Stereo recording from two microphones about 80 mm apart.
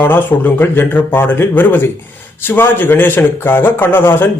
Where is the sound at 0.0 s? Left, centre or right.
Left.